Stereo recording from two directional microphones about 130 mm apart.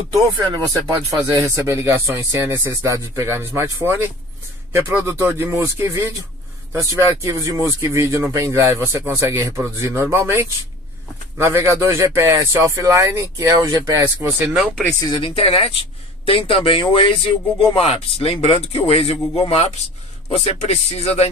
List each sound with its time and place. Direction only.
0.5 s speech: 35° right (ahead or behind)
1.5 s speech: 20° right (ahead or behind)
15.1 s speech: 45° left (ahead or behind)